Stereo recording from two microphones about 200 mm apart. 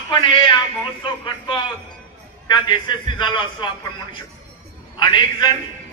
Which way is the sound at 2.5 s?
25° left (ahead or behind).